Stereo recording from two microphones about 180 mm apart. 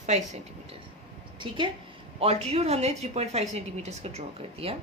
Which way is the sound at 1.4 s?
25° right (ahead or behind).